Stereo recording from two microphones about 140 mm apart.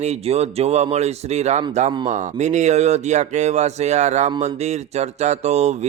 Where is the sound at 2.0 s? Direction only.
60° right (ahead or behind).